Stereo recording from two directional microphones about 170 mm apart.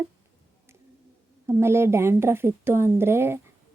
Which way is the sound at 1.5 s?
15° right (ahead or behind).